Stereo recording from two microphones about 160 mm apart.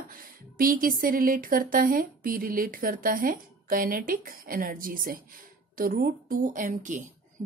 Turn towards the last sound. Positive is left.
turn(degrees=-50)  # may be behind; listen again after turning